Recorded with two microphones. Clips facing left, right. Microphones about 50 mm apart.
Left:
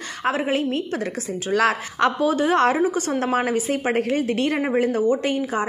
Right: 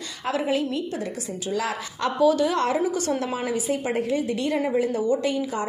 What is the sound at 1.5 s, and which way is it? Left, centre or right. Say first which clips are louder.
Speech: left 8 dB; left.